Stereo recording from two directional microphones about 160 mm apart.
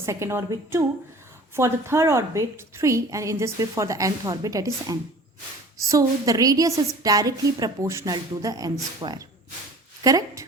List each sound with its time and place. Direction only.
0.0 s a woman's voice: 15° right (ahead or behind)